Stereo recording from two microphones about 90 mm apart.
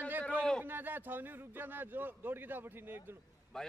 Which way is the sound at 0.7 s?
20° right (ahead or behind).